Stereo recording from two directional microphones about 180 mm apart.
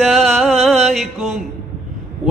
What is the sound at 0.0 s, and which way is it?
Music, centre (ahead or behind).